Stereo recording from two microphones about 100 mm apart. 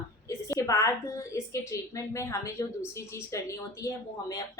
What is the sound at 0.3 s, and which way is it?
A woman's voice, 30° left (ahead or behind).